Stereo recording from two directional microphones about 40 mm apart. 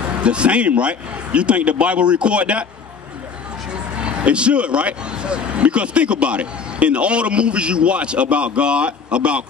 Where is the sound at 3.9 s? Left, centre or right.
Right.